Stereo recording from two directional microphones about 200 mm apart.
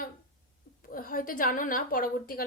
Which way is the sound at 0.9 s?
45° left (ahead or behind).